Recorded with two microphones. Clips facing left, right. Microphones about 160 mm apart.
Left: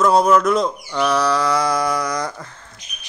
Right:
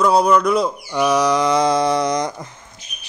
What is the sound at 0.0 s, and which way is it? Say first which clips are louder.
Speech: even; centre (ahead or behind).